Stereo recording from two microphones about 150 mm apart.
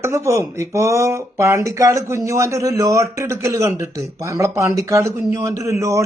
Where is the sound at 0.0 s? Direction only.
20° right (ahead or behind).